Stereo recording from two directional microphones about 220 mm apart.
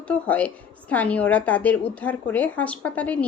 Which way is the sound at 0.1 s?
5° left (ahead or behind).